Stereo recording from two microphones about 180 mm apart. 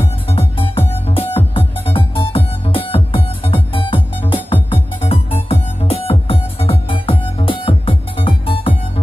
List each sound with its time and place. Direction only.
0.3 s music: 30° left (ahead or behind)